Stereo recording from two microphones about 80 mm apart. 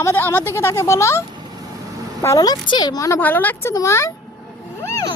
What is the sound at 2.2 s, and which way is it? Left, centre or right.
Speech, left.